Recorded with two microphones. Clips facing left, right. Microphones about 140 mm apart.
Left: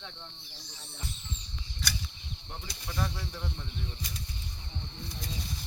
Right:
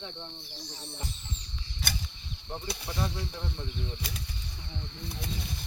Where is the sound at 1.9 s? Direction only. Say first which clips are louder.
Even; 55° right (ahead or behind).